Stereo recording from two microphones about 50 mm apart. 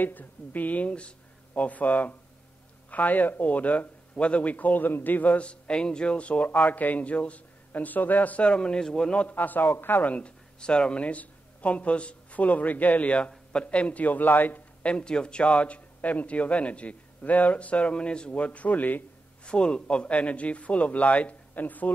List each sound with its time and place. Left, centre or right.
0.0 s a man's voice: left
8.5 s a man's voice: left
9.3 s speech: left
10.1 s a man's voice: centre; by 14.9 s left
14.9 s a man's voice: centre; by 19.0 s left
19.4 s a man's voice: centre; by 21.9 s left